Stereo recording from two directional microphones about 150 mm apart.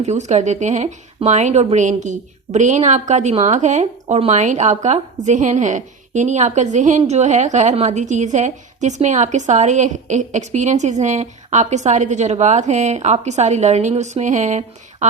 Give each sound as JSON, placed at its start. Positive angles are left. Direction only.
{"t": 0.0, "sound": "speech", "side_deg": -50}